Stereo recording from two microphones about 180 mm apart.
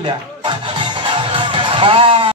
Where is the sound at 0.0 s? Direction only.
25° right (ahead or behind).